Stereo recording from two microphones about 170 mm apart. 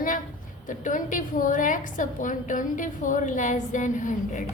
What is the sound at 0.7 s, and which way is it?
A woman's voice, 50° left (ahead or behind).